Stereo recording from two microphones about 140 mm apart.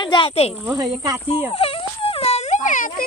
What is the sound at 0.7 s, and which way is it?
Speech, 25° right (ahead or behind).